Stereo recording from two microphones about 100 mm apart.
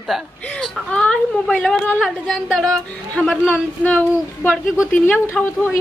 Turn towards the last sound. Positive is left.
turn(degrees=15)  # may be behind; listen again after turning